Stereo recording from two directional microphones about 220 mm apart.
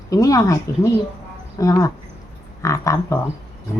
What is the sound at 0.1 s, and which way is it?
Speech, 15° left (ahead or behind).